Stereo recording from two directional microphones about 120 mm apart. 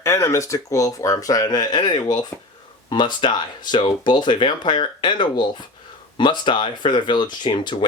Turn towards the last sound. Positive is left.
turn(degrees=40)  # may be behind; listen again after turning